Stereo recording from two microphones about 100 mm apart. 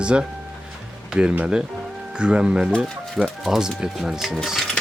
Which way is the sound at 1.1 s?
10° right (ahead or behind).